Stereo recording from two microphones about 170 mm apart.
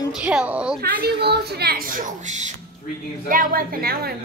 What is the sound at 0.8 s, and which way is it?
A woman's voice, 70° right (ahead or behind).